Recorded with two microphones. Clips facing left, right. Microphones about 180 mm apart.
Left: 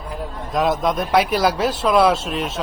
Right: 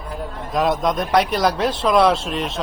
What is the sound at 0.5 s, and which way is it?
A man's voice, centre (ahead or behind).